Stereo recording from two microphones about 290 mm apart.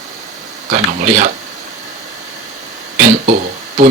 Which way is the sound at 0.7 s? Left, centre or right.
Right.